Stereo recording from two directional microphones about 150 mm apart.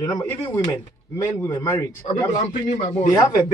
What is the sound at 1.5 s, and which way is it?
Speech, 30° left (ahead or behind).